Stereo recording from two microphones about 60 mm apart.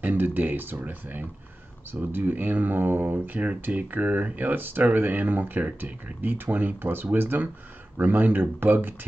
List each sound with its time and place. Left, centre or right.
0.0 s speech: right
3.3 s speech: right